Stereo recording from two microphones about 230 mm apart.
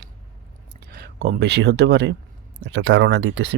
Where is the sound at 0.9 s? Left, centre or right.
Right.